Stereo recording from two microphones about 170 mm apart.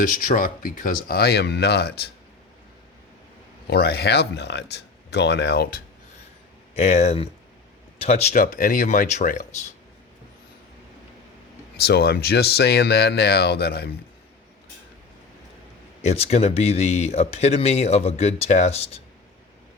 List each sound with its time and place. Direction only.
0.0 s speech: 50° left (ahead or behind); by 2.0 s 75° left (ahead or behind)
3.7 s speech: 70° left (ahead or behind)
6.7 s speech: 40° left (ahead or behind)
11.8 s speech: 70° left (ahead or behind)
16.0 s speech: 40° left (ahead or behind)